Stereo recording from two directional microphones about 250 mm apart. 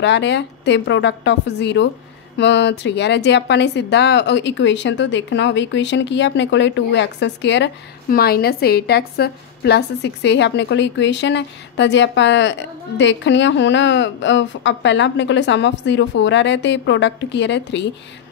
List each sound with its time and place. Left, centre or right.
0.0 s speech: left